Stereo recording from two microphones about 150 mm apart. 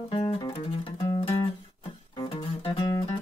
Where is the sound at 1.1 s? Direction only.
35° left (ahead or behind).